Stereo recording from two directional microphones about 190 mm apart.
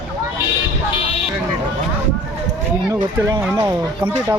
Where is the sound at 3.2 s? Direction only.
15° right (ahead or behind).